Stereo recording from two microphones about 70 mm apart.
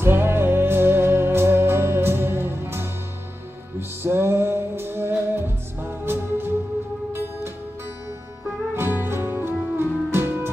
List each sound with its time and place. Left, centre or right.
0.0 s music: right
4.0 s music: right
8.7 s music: right